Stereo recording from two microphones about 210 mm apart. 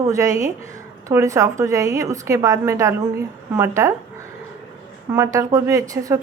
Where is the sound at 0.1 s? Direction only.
15° right (ahead or behind).